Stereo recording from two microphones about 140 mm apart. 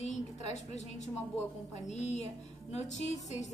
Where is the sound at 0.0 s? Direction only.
55° left (ahead or behind).